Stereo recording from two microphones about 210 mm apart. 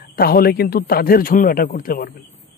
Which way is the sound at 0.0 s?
45° left (ahead or behind).